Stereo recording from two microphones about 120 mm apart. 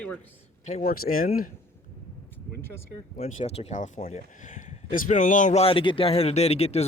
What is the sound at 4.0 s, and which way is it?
A man's voice, 65° left (ahead or behind).